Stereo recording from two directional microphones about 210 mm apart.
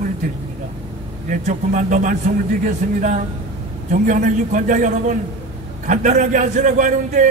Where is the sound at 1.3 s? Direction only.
35° right (ahead or behind).